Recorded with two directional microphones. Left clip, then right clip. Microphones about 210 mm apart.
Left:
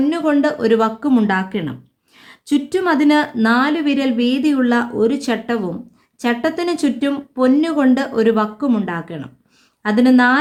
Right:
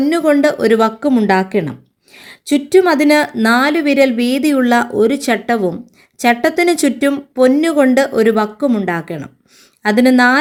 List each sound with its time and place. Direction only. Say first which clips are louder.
0.0 s speech: right 4 dB; 20° right (ahead or behind)